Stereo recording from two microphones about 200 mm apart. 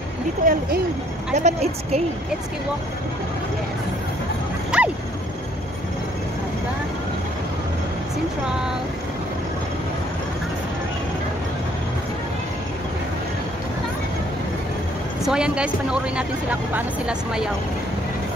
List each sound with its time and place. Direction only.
0.4 s a woman's voice: 45° right (ahead or behind)
4.6 s dog: 5° right (ahead or behind)
15.2 s speech: 5° right (ahead or behind)